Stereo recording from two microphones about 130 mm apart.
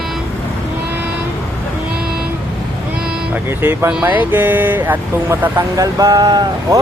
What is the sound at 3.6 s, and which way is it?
Speech, 15° right (ahead or behind).